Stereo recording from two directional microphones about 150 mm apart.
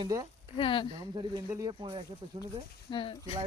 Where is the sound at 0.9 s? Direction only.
25° right (ahead or behind).